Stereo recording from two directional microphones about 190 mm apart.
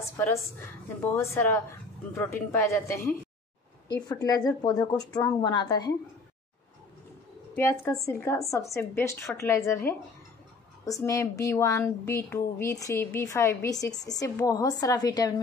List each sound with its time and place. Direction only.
0.2 s a woman's voice: 10° left (ahead or behind)
7.5 s a woman's voice: 15° left (ahead or behind)